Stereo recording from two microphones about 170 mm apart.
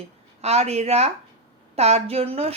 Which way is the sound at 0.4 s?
40° right (ahead or behind).